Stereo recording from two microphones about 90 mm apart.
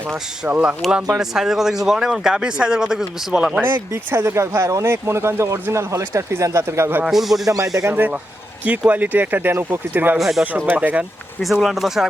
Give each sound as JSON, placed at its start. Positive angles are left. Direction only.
{"t": 0.4, "sound": "speech", "side_deg": -20}
{"t": 0.8, "sound": "speech", "side_deg": -10}
{"t": 3.6, "sound": "speech", "side_deg": -25}
{"t": 7.0, "sound": "speech", "side_deg": -5}
{"t": 7.4, "sound": "speech", "side_deg": -40}
{"t": 7.9, "sound": "speech", "side_deg": -20}
{"t": 10.2, "sound": "speech", "side_deg": 0}
{"t": 10.7, "sound": "speech", "side_deg": -15}
{"t": 11.4, "sound": "speech", "side_deg": 0}